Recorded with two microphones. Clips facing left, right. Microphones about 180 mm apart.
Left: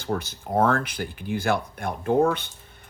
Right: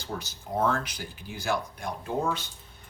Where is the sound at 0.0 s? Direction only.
55° left (ahead or behind).